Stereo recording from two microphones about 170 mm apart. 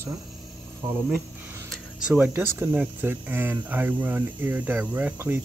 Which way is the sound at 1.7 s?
5° right (ahead or behind).